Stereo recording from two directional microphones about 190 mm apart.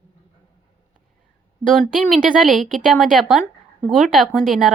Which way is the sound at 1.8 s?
Centre (ahead or behind).